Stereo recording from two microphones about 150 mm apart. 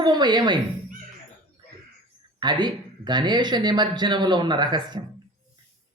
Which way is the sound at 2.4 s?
30° right (ahead or behind).